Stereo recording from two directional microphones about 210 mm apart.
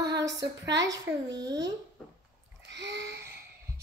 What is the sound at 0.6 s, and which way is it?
Speech, 55° right (ahead or behind).